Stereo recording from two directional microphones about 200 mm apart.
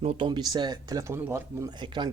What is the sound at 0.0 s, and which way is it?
Speech, 25° right (ahead or behind).